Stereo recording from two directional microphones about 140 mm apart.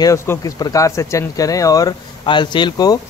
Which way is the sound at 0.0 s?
25° left (ahead or behind).